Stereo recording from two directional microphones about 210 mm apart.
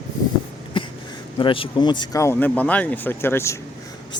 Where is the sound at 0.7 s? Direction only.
25° left (ahead or behind).